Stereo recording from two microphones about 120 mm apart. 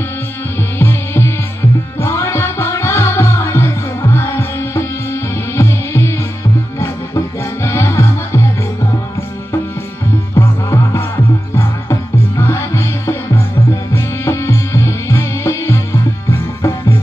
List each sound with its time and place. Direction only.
0.7 s music: 20° left (ahead or behind)
10.3 s music: 25° left (ahead or behind)